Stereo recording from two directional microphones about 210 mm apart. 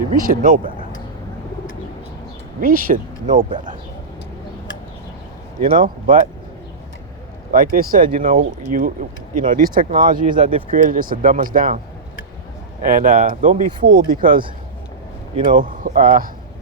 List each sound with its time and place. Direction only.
0.1 s speech: 40° right (ahead or behind)
2.6 s speech: 45° right (ahead or behind)
5.5 s speech: 40° right (ahead or behind)
7.5 s speech: 40° right (ahead or behind)
12.8 s speech: 40° right (ahead or behind)
15.4 s speech: 40° right (ahead or behind)